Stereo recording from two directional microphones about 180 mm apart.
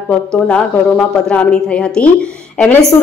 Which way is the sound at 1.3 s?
5° left (ahead or behind).